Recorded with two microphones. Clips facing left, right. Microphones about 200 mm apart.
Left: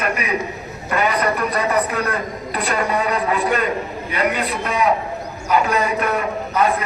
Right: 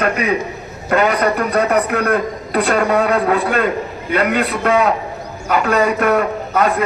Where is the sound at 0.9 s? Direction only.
65° right (ahead or behind).